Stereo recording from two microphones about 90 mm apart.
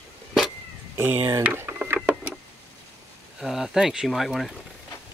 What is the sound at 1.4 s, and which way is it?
Drawer open or close, 20° right (ahead or behind).